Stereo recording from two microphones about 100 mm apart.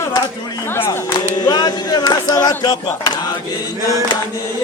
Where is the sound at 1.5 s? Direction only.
40° left (ahead or behind).